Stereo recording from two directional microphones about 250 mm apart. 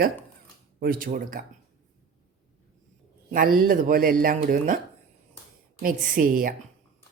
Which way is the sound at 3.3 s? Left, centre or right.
Right.